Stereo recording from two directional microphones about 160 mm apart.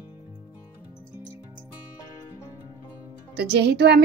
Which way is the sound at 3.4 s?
85° right.